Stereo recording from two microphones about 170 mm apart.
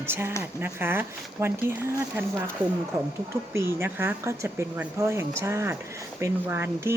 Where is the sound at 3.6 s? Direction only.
15° right (ahead or behind).